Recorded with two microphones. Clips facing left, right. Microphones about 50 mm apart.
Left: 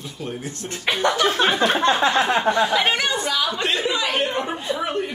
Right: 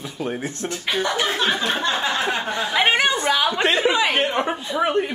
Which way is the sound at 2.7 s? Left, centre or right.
Right.